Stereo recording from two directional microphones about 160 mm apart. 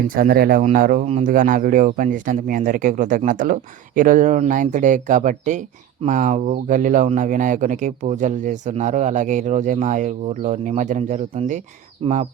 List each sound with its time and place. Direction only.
0.1 s speech: 65° right (ahead or behind)
1.0 s speech: 45° right (ahead or behind)
1.3 s speech: 60° right (ahead or behind); by 12.3 s 40° right (ahead or behind)